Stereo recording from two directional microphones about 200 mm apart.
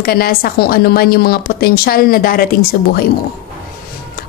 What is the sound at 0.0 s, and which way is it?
Speech, 50° left (ahead or behind).